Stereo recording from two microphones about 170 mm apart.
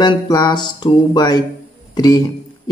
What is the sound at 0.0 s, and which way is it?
A man's voice, 25° left (ahead or behind).